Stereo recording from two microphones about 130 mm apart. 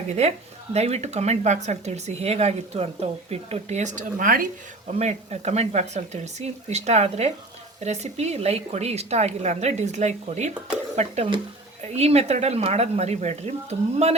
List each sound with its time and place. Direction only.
0.2 s speech: 55° right (ahead or behind); by 4.4 s 90° right
4.9 s speech: 60° right (ahead or behind)